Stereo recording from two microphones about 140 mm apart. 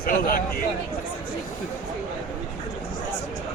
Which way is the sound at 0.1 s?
80° left.